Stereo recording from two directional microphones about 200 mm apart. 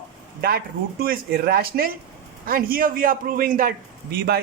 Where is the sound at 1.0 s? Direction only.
50° right (ahead or behind).